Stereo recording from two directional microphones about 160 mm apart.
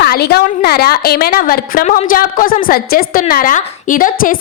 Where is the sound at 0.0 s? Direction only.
85° left.